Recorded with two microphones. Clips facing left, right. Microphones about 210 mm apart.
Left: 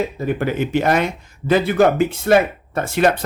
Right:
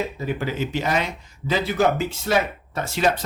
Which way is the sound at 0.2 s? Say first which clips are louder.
Left 5 dB; 55° left (ahead or behind).